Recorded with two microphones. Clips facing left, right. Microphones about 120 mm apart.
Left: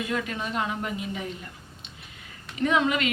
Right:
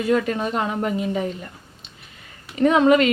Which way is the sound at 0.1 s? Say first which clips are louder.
Right 9 dB; 45° right (ahead or behind).